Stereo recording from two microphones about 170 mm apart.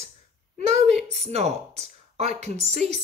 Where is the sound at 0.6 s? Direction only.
40° right (ahead or behind).